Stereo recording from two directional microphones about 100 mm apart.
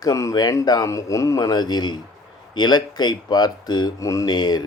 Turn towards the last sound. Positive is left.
turn(degrees=45)  # may be behind; listen again after turning